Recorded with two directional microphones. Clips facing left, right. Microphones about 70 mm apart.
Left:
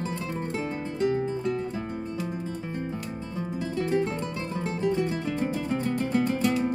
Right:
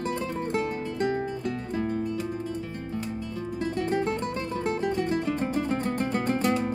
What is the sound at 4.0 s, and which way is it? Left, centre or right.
Music, right.